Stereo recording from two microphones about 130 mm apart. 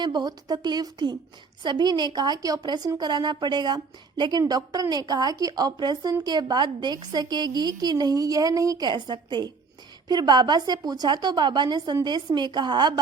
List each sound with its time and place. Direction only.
0.0 s a woman's voice: 35° right (ahead or behind)